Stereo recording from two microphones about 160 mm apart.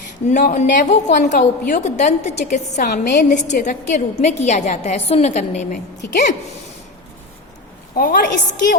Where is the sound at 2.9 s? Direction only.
90° left.